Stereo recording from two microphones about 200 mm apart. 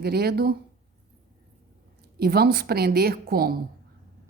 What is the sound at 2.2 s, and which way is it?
A woman's voice, 50° right (ahead or behind).